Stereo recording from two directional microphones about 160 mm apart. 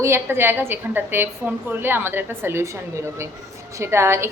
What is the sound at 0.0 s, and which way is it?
A woman's voice, 15° right (ahead or behind).